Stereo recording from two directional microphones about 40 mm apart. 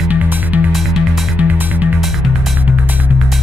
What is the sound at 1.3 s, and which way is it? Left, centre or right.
Music, right.